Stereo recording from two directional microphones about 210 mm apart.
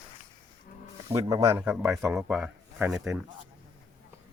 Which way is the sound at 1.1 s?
15° right (ahead or behind).